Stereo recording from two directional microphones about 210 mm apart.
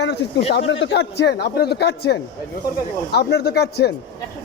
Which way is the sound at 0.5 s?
60° left (ahead or behind).